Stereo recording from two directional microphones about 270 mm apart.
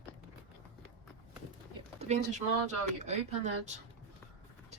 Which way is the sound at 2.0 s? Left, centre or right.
Right.